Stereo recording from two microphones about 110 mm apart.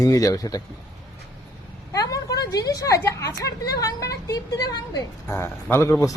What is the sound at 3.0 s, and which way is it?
A man's voice, 25° left (ahead or behind).